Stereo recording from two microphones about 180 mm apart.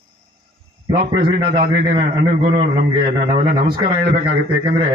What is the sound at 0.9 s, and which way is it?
Speech, 25° right (ahead or behind).